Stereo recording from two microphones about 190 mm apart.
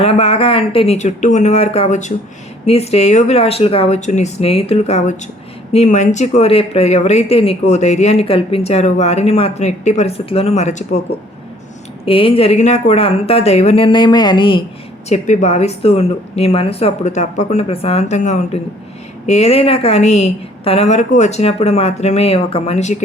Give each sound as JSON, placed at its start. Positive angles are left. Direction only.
{"t": 0.0, "sound": "a woman's voice", "side_deg": 35}
{"t": 12.0, "sound": "speech", "side_deg": 30}
{"t": 15.1, "sound": "a woman's voice", "side_deg": 40}